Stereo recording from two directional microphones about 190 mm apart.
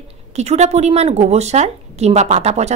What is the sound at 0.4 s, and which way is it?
A woman's voice, 35° right (ahead or behind).